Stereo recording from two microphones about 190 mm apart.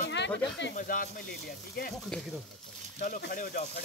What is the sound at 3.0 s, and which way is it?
Speech, 50° left (ahead or behind).